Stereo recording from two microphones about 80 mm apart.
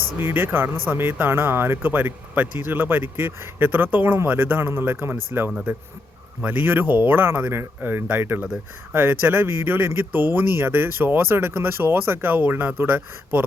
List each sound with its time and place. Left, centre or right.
0.2 s speech: right